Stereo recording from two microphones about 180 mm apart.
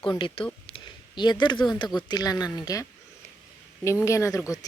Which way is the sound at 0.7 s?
25° left (ahead or behind).